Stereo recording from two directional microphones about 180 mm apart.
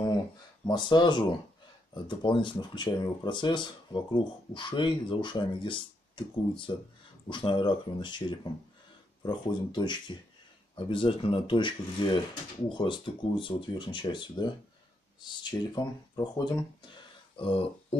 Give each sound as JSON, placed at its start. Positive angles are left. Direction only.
{"t": 0.7, "sound": "speech", "side_deg": 25}